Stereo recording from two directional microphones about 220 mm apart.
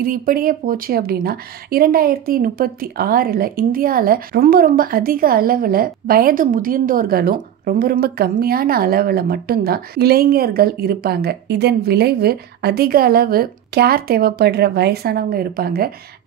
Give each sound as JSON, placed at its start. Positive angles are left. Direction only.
{"t": 0.0, "sound": "speech", "side_deg": -40}